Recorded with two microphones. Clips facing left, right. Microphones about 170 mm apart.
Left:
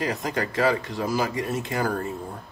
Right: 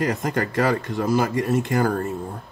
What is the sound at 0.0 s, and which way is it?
Speech, 50° right (ahead or behind).